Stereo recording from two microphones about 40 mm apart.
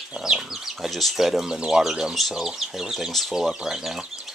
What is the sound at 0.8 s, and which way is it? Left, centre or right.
Speech, centre.